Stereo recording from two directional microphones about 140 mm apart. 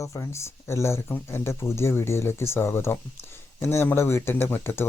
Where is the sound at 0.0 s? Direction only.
20° left (ahead or behind).